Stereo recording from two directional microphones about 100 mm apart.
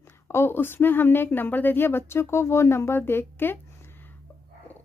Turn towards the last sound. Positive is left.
turn(degrees=20)  # may be behind; listen again after turning